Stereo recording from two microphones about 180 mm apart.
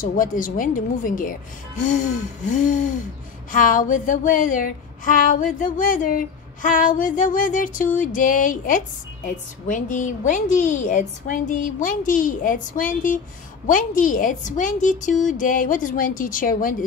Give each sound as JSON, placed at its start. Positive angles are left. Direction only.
{"t": 0.0, "sound": "speech", "side_deg": 45}